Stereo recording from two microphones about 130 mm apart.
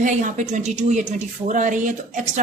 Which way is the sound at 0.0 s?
75° right (ahead or behind).